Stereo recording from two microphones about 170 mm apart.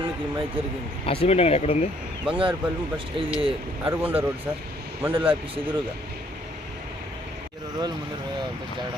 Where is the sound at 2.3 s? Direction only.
30° right (ahead or behind).